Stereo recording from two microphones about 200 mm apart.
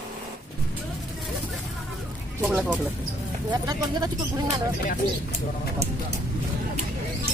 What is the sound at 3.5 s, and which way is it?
Speech, 15° right (ahead or behind).